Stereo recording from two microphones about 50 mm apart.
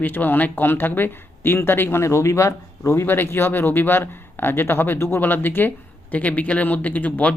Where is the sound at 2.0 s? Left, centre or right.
Left.